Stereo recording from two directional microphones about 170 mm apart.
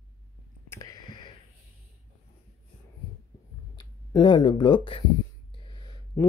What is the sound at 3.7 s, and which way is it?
Speech, 25° left (ahead or behind).